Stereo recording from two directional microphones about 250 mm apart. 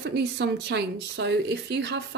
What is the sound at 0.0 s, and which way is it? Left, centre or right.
Speech, right.